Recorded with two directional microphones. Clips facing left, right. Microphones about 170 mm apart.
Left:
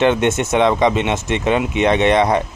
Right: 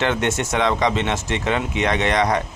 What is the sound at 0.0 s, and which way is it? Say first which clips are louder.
Speech: left 6 dB; 20° left (ahead or behind).